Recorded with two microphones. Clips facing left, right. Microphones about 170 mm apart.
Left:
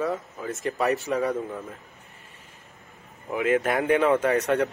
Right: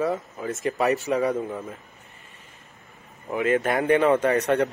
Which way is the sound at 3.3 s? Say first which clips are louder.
Right 1 dB; centre (ahead or behind).